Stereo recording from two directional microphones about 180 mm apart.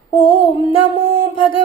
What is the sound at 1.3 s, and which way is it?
Speech, 30° left (ahead or behind).